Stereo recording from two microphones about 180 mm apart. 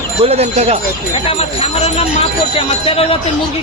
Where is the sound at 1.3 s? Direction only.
35° left (ahead or behind).